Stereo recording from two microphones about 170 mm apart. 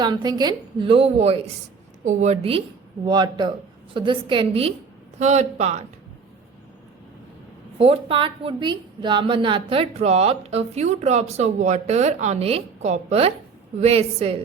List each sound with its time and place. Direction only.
0.0 s a woman's voice: 25° right (ahead or behind); by 5.8 s 40° right (ahead or behind)
7.8 s a woman's voice: 35° right (ahead or behind)